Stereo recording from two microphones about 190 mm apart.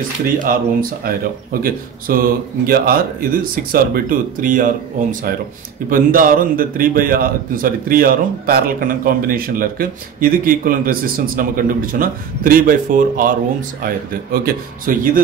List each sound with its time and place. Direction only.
0.4 s a man's voice: 50° right (ahead or behind)
5.9 s a man's voice: 50° right (ahead or behind)